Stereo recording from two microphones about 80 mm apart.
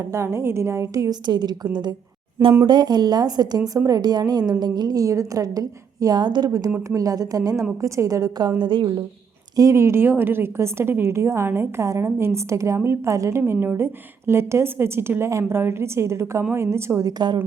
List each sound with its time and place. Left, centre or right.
0.0 s a woman's voice: right
1.2 s a woman's voice: right
6.7 s a woman's voice: right
6.9 s a woman's voice: right
8.4 s a woman's voice: right
9.6 s a woman's voice: right
13.4 s a woman's voice: right
17.0 s speech: right